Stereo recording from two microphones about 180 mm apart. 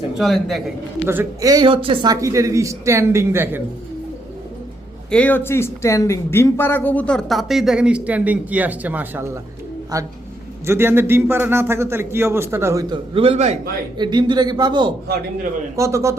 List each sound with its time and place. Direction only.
0.2 s speech: centre (ahead or behind)
1.0 s speech: 10° right (ahead or behind)
5.1 s a man's voice: 10° left (ahead or behind); by 13.0 s 15° right (ahead or behind)
13.1 s a man's voice: 35° right (ahead or behind)
14.0 s a man's voice: 25° right (ahead or behind)